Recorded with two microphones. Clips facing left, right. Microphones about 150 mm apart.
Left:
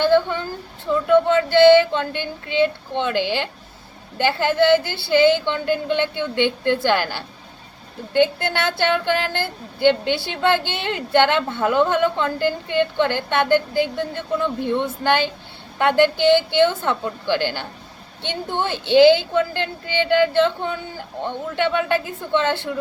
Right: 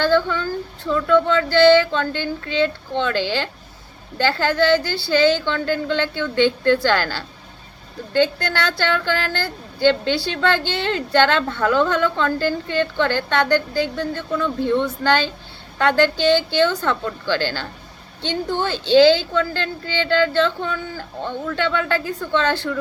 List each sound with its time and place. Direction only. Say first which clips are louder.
0.0 s a woman's voice: left 1 dB; 20° left (ahead or behind)